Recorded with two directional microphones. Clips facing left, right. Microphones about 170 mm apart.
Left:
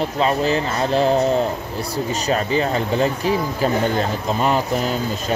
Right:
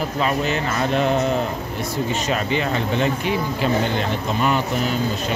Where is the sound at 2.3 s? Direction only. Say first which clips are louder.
Left 5 dB; 35° left (ahead or behind).